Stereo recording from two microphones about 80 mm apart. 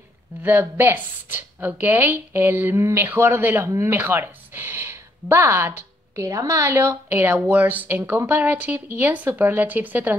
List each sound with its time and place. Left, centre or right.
0.4 s a woman's voice: right
6.1 s a woman's voice: right